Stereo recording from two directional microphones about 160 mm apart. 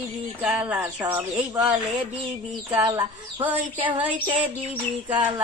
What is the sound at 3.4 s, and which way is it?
Speech, 10° right (ahead or behind).